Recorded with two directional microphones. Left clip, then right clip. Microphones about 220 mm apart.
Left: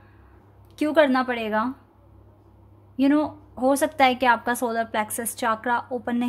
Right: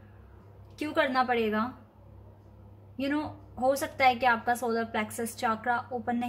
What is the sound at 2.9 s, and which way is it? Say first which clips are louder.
A woman's voice: left 10 dB; 45° left (ahead or behind).